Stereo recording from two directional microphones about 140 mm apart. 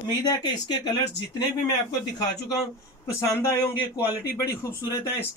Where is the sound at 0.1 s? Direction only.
30° left (ahead or behind).